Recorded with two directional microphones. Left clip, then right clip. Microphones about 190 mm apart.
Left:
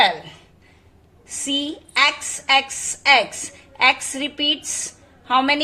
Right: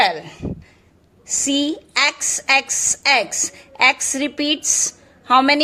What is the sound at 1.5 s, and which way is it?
A woman's voice, 35° right (ahead or behind).